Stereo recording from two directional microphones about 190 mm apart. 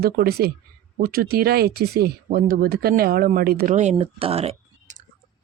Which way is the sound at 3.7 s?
35° right (ahead or behind).